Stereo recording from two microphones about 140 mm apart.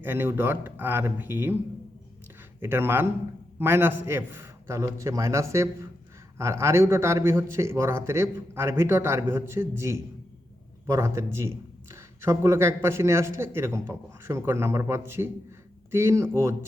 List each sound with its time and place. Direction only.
0.0 s speech: 15° right (ahead or behind)
2.6 s a man's voice: 15° right (ahead or behind)